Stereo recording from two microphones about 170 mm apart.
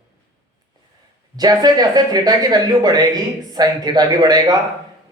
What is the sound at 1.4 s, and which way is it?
Speech, 25° right (ahead or behind).